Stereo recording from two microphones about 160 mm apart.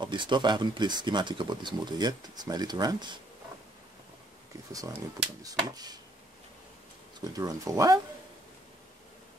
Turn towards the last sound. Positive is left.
turn(degrees=-20)  # may be behind; listen again after turning